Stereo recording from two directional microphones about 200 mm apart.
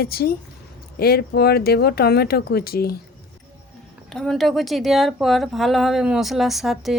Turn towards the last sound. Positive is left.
turn(degrees=0)  # may be behind; listen again after turning